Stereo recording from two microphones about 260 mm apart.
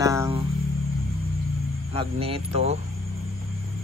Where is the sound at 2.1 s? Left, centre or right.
Right.